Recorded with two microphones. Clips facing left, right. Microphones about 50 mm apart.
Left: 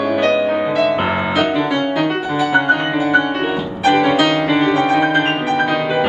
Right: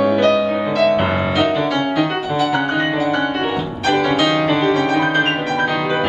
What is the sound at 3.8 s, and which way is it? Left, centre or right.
Music, centre.